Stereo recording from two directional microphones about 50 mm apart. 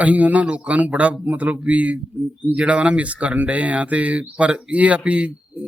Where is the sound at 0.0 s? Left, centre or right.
Right.